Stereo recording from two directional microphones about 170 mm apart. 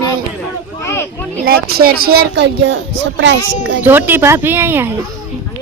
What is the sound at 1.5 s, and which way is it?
Speech, 65° right (ahead or behind).